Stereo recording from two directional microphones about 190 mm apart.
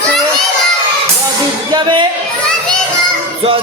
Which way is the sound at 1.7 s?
25° right (ahead or behind).